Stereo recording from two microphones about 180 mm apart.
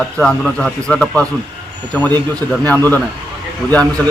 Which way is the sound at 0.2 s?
5° left (ahead or behind).